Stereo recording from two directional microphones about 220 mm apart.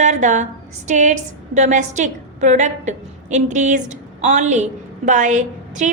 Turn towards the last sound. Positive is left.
turn(degrees=-35)  # may be behind; listen again after turning